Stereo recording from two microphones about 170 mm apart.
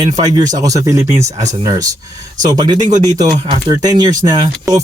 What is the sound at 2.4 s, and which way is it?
Speech, 25° right (ahead or behind).